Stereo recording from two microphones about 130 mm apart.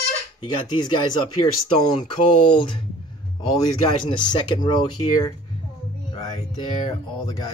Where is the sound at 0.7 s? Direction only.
35° left (ahead or behind).